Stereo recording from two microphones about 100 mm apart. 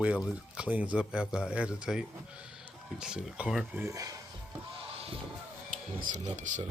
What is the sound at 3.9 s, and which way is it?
Speech, 35° right (ahead or behind).